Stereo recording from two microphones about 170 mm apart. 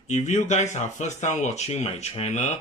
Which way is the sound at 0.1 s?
45° left (ahead or behind).